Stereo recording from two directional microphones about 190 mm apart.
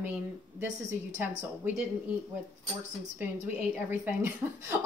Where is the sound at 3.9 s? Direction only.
10° right (ahead or behind).